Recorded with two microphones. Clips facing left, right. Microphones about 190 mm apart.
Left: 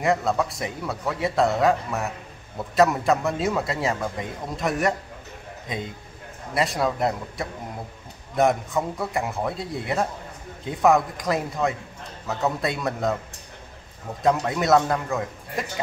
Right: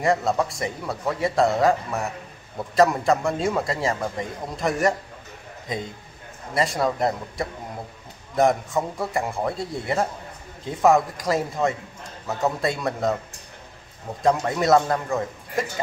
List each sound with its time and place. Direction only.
0.0 s a man's voice: centre (ahead or behind)
6.5 s a man's voice: centre (ahead or behind)
14.4 s a man's voice: centre (ahead or behind)